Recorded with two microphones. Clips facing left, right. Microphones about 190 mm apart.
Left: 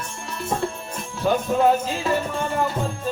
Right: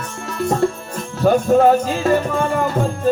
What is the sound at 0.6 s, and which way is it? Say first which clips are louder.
Music: right 8 dB; 50° right (ahead or behind).